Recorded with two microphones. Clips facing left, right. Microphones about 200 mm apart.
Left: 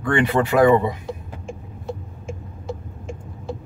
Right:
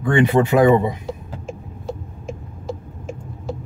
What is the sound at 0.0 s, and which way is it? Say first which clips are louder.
Speech: right 3 dB; 20° right (ahead or behind).